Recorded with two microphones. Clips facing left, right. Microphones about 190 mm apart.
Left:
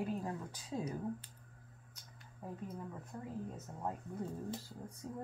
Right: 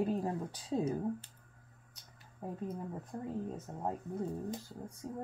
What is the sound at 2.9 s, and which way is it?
Speech, 35° right (ahead or behind).